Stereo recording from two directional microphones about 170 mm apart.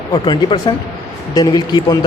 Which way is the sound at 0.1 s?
25° left (ahead or behind).